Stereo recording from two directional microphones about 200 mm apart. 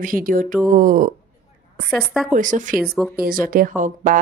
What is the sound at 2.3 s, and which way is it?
A woman's voice, 40° right (ahead or behind).